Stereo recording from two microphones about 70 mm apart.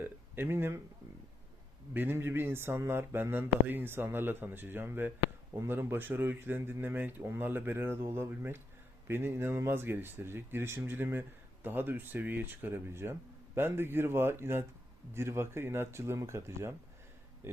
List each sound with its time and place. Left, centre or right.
0.0 s speech: right
1.9 s speech: right